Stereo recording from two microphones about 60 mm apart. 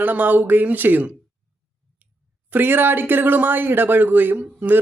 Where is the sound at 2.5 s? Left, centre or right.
Right.